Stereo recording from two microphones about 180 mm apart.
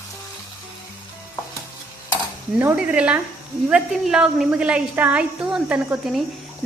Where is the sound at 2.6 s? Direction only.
10° right (ahead or behind).